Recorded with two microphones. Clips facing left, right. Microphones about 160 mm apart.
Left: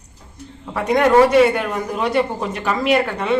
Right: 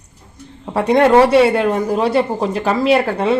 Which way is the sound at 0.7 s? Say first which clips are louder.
Right 3 dB; 30° right (ahead or behind).